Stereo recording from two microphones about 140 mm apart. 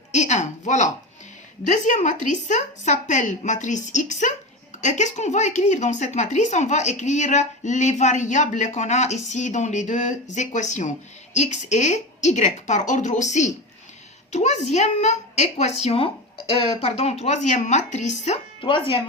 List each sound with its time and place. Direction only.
0.1 s a sound: 55° left (ahead or behind)
1.6 s speech: 60° left (ahead or behind)
18.6 s speech: 35° left (ahead or behind)